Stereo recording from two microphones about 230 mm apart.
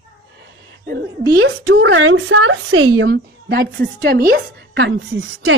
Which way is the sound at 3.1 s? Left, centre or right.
Right.